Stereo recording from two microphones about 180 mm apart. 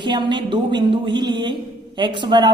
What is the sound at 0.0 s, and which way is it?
A man's voice, 25° right (ahead or behind).